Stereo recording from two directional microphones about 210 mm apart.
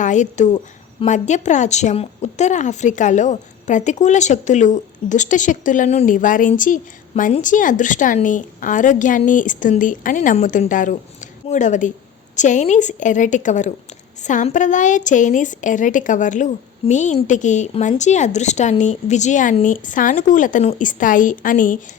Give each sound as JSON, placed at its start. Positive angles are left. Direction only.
{"t": 0.0, "sound": "a woman's voice", "side_deg": 35}